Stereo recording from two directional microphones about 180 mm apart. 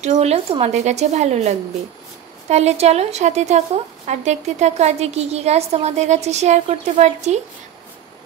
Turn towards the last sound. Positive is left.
turn(degrees=-40)  # may be behind; listen again after turning